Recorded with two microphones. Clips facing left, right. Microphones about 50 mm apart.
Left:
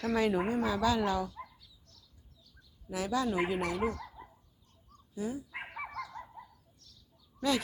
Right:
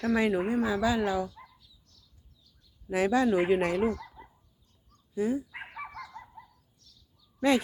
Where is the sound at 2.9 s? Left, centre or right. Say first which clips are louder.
Right 7 dB; right.